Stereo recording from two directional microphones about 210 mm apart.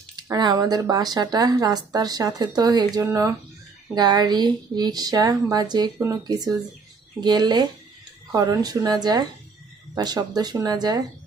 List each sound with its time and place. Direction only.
0.2 s speech: 20° right (ahead or behind)